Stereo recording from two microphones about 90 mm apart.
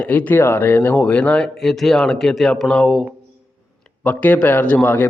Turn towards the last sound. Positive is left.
turn(degrees=20)  # may be behind; listen again after turning